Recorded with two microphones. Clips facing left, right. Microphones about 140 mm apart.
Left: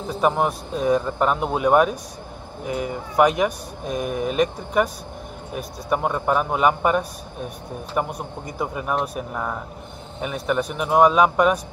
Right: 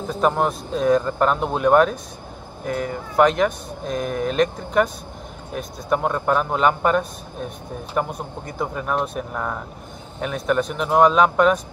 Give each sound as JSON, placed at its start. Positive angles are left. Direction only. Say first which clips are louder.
{"t": 0.1, "sound": "speech", "louder": "even", "side_deg": 5}